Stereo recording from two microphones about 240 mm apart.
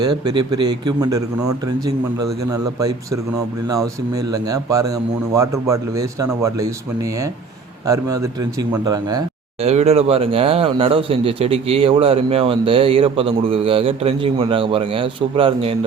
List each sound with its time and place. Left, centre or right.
1.6 s a man's voice: centre
9.6 s speech: right